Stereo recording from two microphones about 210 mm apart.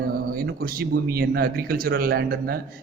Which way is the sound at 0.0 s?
45° right (ahead or behind).